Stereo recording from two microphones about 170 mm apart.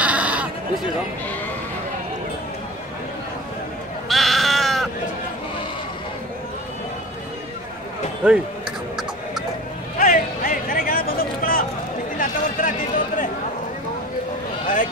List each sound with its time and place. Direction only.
0.0 s sheep: 10° right (ahead or behind)
4.1 s sheep: centre (ahead or behind)
8.2 s speech: 5° right (ahead or behind)
9.9 s music: 50° left (ahead or behind)
12.2 s a sound: 50° left (ahead or behind)